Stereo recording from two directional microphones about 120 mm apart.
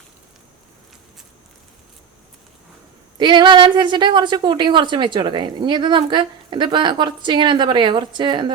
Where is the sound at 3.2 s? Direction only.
40° right (ahead or behind).